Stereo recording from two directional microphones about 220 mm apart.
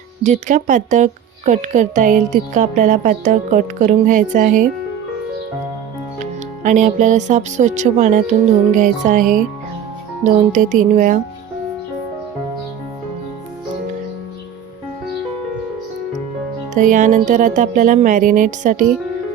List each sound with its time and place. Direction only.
0.2 s speech: 35° right (ahead or behind)
6.1 s speech: 35° right (ahead or behind)
10.2 s speech: 35° right (ahead or behind)
16.7 s speech: 35° right (ahead or behind)